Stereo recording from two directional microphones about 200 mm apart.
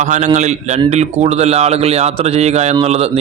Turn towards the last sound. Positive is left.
turn(degrees=-30)  # may be behind; listen again after turning